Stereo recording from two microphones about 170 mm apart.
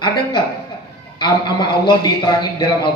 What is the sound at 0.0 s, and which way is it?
A man's voice, 25° left (ahead or behind).